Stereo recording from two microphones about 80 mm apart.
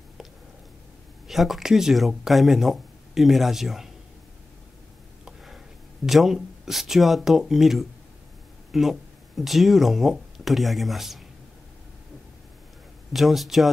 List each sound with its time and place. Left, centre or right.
1.2 s speech: centre
5.2 s a sound: centre
6.0 s speech: centre
13.1 s speech: centre